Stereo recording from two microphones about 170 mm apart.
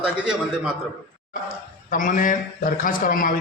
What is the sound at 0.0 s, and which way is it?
Speech, 5° right (ahead or behind).